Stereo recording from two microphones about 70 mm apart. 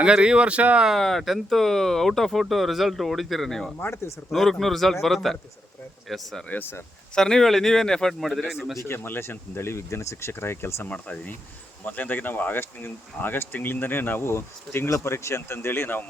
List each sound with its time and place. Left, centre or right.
0.0 s speech: centre
0.9 s speech: centre
3.8 s speech: left
4.3 s speech: centre
6.5 s speech: left
7.2 s speech: centre
8.8 s speech: left
10.8 s speech: left